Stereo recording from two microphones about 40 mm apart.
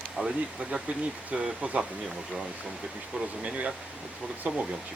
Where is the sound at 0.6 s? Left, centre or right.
Right.